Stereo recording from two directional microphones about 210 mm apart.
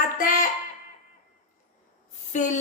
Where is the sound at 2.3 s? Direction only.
35° left (ahead or behind).